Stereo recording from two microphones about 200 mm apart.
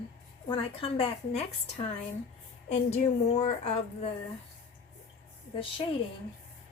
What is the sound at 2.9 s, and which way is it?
Speech, 35° left (ahead or behind).